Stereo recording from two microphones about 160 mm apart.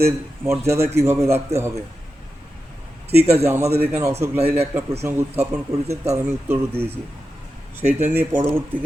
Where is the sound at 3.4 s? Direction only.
15° right (ahead or behind).